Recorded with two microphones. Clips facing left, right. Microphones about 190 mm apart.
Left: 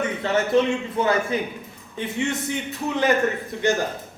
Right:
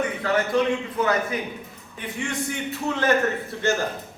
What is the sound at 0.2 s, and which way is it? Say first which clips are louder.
A man's voice: left 3 dB; 25° left (ahead or behind).